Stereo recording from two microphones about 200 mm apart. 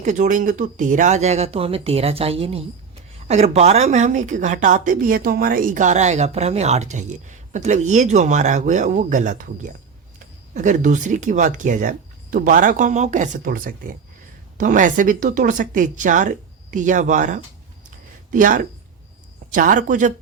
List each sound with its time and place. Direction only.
0.0 s a woman's voice: 40° right (ahead or behind)